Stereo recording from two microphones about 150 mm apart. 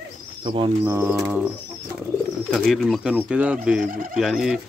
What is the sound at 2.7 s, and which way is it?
Speech, 5° right (ahead or behind).